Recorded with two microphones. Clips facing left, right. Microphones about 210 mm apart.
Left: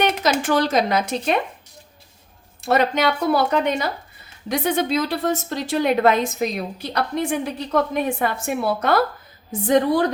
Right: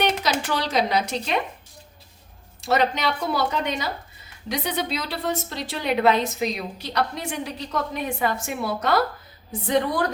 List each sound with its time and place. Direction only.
0.0 s speech: 50° left (ahead or behind)
2.6 s a woman's voice: 50° left (ahead or behind)